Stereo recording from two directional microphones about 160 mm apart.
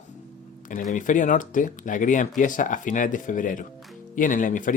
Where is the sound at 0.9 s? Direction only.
50° left (ahead or behind).